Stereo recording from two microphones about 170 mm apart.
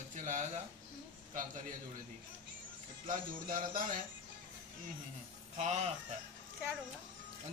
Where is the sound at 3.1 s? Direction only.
55° right (ahead or behind).